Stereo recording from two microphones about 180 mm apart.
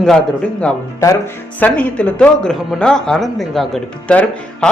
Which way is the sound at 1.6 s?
5° left (ahead or behind).